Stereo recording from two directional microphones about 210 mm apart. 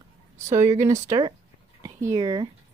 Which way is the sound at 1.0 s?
15° right (ahead or behind).